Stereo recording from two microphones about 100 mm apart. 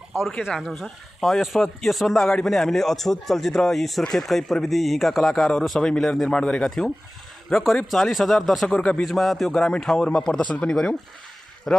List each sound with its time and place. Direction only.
0.6 s a man's voice: centre (ahead or behind)